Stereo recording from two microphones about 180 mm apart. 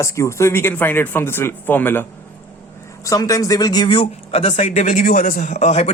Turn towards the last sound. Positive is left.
turn(degrees=40)  # may be behind; listen again after turning